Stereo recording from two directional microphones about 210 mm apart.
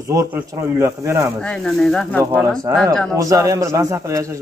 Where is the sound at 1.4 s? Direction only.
Centre (ahead or behind).